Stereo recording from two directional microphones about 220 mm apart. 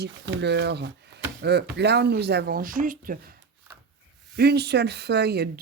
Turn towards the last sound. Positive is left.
turn(degrees=-50)  # may be behind; listen again after turning